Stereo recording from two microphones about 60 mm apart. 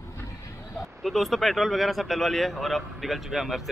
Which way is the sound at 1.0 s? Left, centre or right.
Centre.